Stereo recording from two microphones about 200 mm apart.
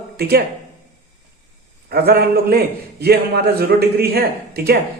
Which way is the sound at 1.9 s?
50° right (ahead or behind).